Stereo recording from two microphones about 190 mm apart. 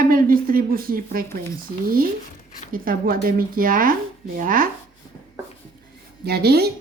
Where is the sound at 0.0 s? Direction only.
50° right (ahead or behind).